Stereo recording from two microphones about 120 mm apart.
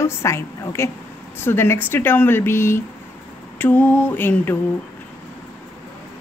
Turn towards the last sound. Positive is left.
turn(degrees=15)  # may be behind; listen again after turning